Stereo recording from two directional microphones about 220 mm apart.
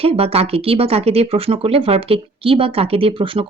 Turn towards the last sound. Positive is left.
turn(degrees=-25)  # may be behind; listen again after turning